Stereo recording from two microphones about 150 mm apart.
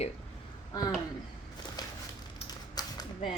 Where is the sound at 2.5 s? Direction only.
25° left (ahead or behind).